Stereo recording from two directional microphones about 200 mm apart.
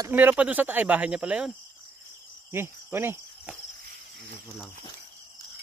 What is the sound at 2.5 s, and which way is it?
Cricket, 10° right (ahead or behind).